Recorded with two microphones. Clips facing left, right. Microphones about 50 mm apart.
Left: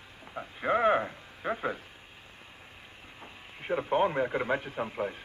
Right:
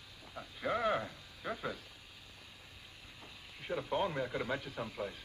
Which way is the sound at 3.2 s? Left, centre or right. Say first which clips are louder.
Left 7 dB; left.